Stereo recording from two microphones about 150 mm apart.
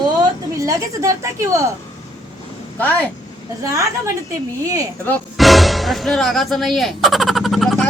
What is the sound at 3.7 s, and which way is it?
Speech, 20° right (ahead or behind).